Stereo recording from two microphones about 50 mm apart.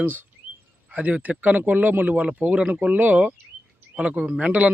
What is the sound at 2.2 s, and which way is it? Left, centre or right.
A man's voice, right.